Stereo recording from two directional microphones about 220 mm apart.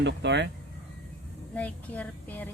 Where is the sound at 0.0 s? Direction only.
50° right (ahead or behind).